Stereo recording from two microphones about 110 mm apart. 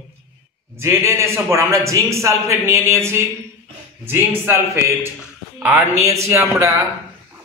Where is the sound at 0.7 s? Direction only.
25° right (ahead or behind).